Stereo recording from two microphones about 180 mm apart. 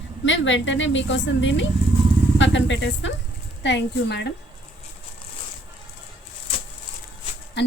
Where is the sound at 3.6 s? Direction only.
80° left.